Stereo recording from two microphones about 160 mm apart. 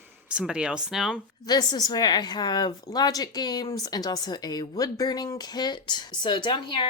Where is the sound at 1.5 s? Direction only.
25° left (ahead or behind).